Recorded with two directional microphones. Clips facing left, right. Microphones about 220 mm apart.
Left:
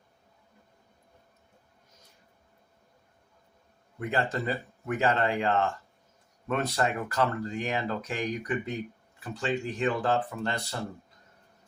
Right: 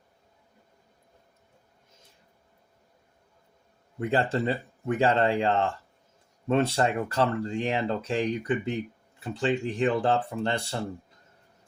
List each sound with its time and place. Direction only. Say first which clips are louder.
4.1 s speech: right 4 dB; 30° right (ahead or behind)